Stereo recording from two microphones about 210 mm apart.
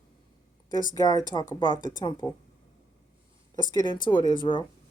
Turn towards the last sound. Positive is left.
turn(degrees=20)  # may be behind; listen again after turning